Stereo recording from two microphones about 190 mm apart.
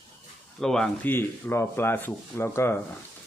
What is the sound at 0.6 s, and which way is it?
Speech, 5° left (ahead or behind).